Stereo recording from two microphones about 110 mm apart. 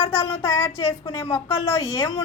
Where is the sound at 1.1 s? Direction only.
50° left (ahead or behind).